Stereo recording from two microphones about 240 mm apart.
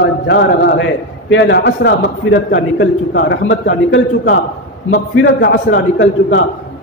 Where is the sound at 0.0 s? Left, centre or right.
Left.